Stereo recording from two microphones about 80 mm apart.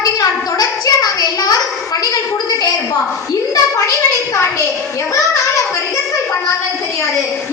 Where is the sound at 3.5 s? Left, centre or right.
Left.